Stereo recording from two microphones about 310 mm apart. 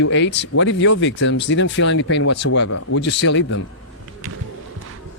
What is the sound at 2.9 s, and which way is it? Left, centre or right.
Speech, left.